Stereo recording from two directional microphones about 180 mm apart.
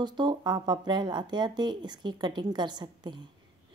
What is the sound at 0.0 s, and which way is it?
A woman's voice, 25° right (ahead or behind).